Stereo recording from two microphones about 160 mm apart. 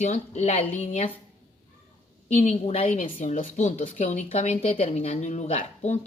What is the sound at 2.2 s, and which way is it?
Speech, 40° left (ahead or behind).